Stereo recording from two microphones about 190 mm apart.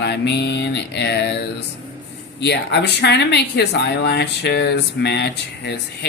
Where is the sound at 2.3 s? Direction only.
60° left (ahead or behind).